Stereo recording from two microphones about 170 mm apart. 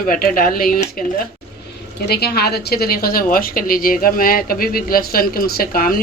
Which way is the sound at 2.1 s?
70° left (ahead or behind).